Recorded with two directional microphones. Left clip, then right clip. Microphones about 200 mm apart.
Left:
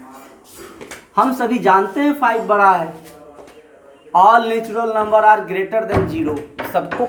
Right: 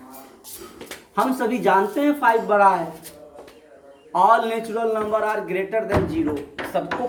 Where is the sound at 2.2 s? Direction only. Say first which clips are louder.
Left 3 dB; 25° left (ahead or behind).